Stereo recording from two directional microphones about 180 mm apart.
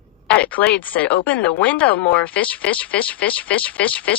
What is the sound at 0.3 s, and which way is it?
Speech, 5° left (ahead or behind).